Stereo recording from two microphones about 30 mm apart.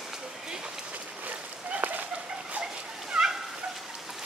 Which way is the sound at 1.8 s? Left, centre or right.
Right.